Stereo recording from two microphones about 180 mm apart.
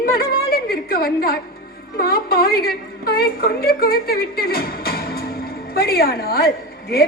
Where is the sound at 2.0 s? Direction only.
55° left (ahead or behind).